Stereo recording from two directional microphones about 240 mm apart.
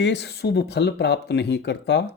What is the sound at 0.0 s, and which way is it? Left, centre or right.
Speech, left.